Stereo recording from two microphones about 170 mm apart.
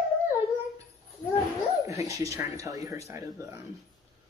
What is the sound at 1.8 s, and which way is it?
Speech, 20° right (ahead or behind).